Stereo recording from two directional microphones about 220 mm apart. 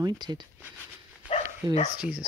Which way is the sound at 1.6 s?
20° right (ahead or behind).